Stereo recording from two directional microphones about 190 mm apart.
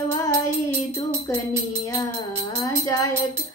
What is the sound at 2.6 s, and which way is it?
Music, 15° left (ahead or behind).